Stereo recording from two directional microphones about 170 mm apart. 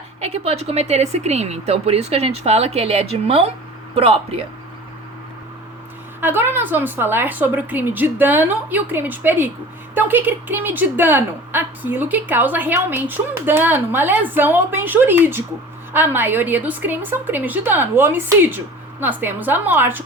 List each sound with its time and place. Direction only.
0.2 s speech: 40° right (ahead or behind)
6.1 s a woman's voice: 10° right (ahead or behind)